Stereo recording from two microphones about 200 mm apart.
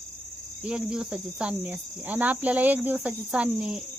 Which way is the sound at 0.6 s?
5° right (ahead or behind).